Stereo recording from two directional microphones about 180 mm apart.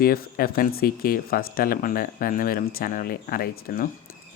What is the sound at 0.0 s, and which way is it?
Speech, 55° left (ahead or behind).